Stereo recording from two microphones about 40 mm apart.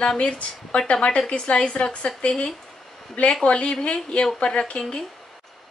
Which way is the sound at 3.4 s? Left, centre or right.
Left.